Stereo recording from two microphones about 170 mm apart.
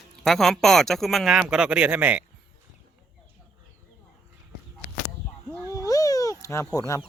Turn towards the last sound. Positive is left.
turn(degrees=15)  # may be behind; listen again after turning